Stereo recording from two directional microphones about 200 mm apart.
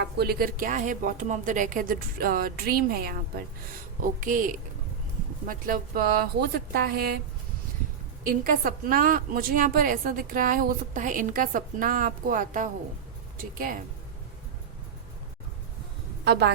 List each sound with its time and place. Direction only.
0.0 s a woman's voice: 50° right (ahead or behind)
8.3 s a woman's voice: 45° right (ahead or behind)
16.2 s speech: 55° right (ahead or behind)